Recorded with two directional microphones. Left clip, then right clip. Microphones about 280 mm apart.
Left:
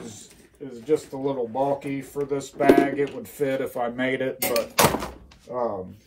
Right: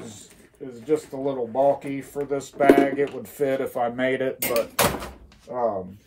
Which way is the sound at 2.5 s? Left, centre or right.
Centre.